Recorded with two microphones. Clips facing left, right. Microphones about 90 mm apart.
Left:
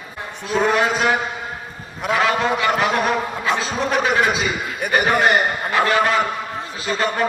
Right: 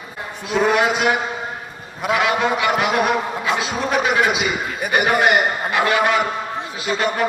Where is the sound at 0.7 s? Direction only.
35° left (ahead or behind).